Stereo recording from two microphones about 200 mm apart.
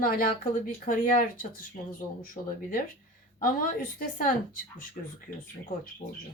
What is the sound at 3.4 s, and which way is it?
A woman's voice, 45° left (ahead or behind).